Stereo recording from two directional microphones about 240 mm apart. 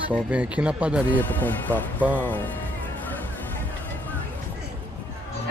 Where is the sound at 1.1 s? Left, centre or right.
Centre.